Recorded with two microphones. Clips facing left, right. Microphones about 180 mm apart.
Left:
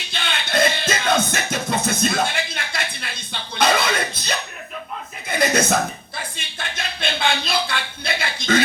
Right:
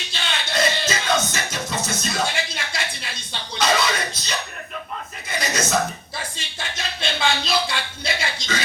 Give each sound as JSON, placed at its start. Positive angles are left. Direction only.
{"t": 0.1, "sound": "music", "side_deg": 55}
{"t": 5.3, "sound": "chuckle", "side_deg": 55}
{"t": 6.3, "sound": "a sound", "side_deg": 55}